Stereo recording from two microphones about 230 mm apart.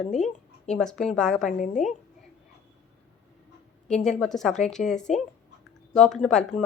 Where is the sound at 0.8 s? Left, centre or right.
Centre.